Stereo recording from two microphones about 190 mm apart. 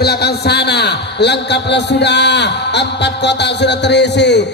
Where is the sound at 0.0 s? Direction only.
60° left (ahead or behind).